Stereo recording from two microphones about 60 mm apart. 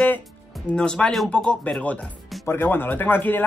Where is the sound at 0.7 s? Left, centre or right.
Centre.